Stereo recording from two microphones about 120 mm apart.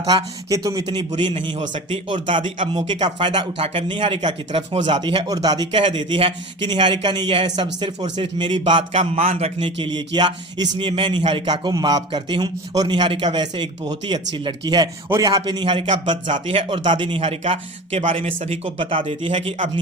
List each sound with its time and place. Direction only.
0.0 s a man's voice: 35° right (ahead or behind); by 9.6 s 55° right (ahead or behind)
9.6 s a man's voice: 45° right (ahead or behind)
17.2 s speech: 55° right (ahead or behind)